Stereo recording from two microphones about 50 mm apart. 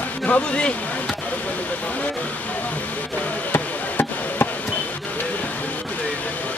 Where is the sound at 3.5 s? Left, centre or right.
Left.